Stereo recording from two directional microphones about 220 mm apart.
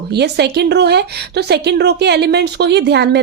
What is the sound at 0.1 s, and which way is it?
Speech, 50° right (ahead or behind).